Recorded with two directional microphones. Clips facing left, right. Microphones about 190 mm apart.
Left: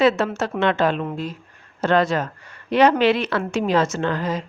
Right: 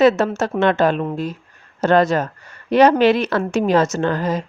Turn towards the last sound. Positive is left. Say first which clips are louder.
# right 3 dB
turn(degrees=-45)  # may be behind; listen again after turning